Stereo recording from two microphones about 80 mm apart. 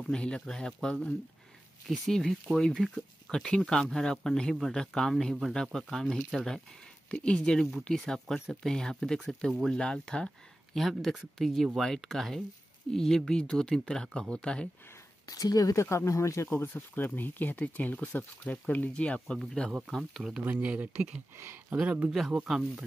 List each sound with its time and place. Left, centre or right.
0.1 s speech: centre
15.2 s speech: left
16.4 s speech: left; by 20.4 s centre
20.5 s speech: centre
22.3 s speech: centre